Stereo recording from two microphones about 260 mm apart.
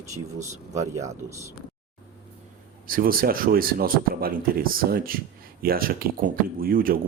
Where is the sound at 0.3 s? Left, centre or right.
Right.